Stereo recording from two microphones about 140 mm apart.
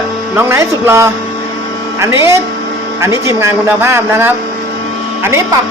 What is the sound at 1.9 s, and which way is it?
Speech, 20° right (ahead or behind).